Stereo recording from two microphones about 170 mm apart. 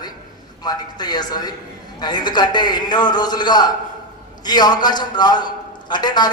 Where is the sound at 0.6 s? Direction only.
25° left (ahead or behind).